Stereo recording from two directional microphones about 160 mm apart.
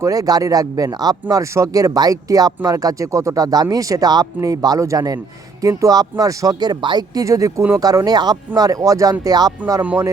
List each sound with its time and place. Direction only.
0.0 s speech: 20° right (ahead or behind)
9.8 s speech: 10° right (ahead or behind)